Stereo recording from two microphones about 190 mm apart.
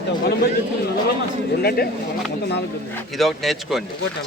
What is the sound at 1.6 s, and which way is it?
Speech, 55° left (ahead or behind).